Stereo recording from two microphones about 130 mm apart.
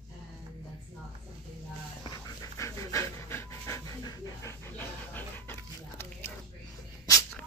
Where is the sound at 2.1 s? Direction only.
30° left (ahead or behind).